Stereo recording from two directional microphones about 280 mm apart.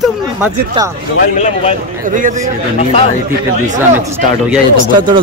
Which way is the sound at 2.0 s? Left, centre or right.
Right.